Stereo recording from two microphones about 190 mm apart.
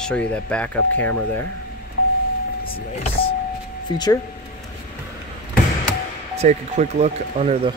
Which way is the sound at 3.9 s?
20° left (ahead or behind).